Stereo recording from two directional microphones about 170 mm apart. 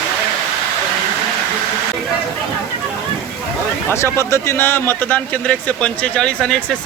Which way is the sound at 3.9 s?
15° left (ahead or behind).